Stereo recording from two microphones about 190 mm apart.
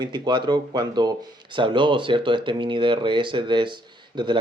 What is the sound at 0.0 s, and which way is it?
A man's voice, 25° right (ahead or behind).